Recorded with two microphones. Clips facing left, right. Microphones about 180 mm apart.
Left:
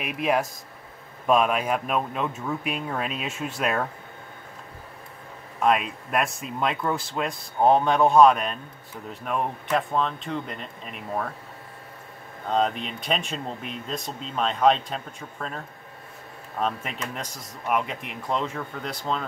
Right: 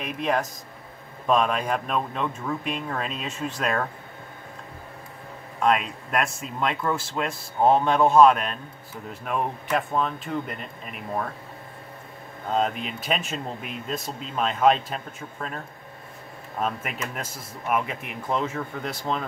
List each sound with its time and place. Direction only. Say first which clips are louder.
0.0 s speech: left 1 dB; 10° left (ahead or behind)
5.6 s speech: even; 5° left (ahead or behind)
12.4 s speech: left 1 dB; 5° right (ahead or behind)